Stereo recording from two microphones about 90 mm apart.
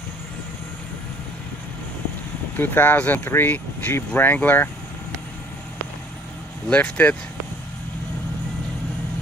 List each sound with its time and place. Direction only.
2.5 s speech: 20° left (ahead or behind)
6.7 s speech: 15° left (ahead or behind)